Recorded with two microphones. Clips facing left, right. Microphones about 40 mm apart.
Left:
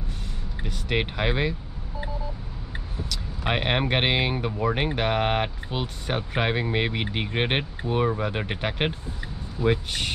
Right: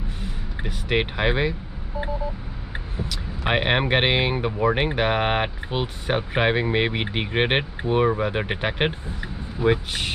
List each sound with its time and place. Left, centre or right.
0.2 s speech: centre
2.7 s speech: centre